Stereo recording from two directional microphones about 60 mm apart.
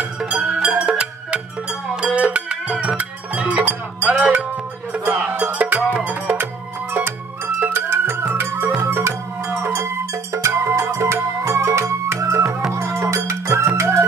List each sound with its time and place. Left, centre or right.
0.3 s music: centre
4.9 s music: right
6.9 s music: right